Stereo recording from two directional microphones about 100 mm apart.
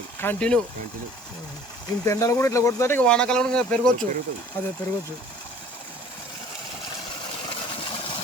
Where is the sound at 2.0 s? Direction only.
30° left (ahead or behind).